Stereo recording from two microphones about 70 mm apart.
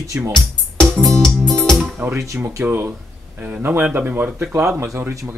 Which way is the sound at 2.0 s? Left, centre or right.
Right.